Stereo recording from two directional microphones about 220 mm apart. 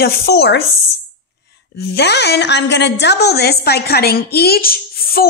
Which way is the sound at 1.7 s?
50° left (ahead or behind).